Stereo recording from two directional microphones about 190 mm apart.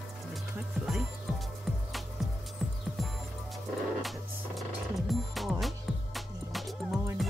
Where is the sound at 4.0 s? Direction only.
Centre (ahead or behind).